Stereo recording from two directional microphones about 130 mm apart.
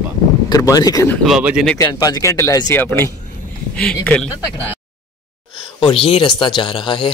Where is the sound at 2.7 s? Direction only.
15° left (ahead or behind).